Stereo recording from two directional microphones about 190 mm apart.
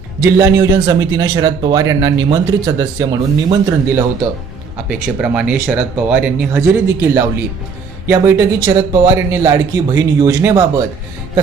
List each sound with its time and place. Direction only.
0.2 s a man's voice: 15° right (ahead or behind)
4.9 s speech: 5° right (ahead or behind)